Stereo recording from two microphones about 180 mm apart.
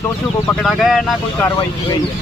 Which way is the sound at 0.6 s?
Centre (ahead or behind).